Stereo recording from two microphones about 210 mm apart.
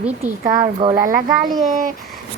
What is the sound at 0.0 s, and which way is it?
Speech, 10° right (ahead or behind).